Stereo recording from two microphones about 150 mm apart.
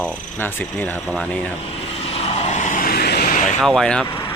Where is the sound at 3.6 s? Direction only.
5° left (ahead or behind).